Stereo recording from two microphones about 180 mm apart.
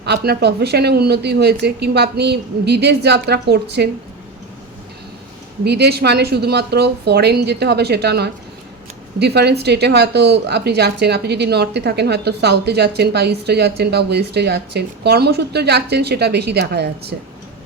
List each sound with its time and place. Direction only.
0.0 s speech: 65° right (ahead or behind)
5.6 s speech: 65° right (ahead or behind)